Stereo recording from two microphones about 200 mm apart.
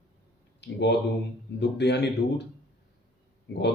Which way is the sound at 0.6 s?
60° left (ahead or behind).